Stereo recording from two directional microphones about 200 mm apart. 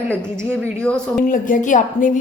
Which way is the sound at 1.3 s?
40° left (ahead or behind).